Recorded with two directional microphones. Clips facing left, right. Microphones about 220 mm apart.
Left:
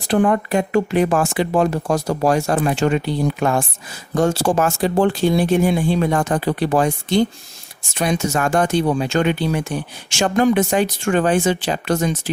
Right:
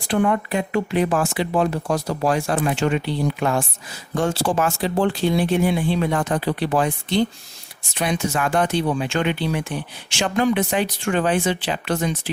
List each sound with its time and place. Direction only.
0.1 s speech: 45° left (ahead or behind)